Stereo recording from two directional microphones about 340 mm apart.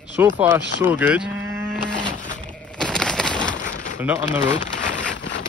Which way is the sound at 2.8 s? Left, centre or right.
Centre.